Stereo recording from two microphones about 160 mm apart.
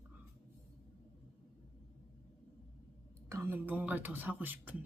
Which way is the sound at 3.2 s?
15° right (ahead or behind).